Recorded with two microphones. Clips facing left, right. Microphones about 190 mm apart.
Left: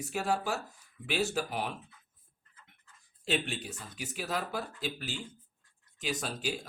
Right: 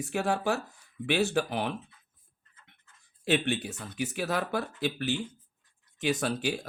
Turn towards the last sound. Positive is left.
turn(degrees=-65)  # may be behind; listen again after turning